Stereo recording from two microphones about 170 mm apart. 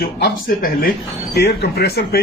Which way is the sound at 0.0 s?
60° left (ahead or behind).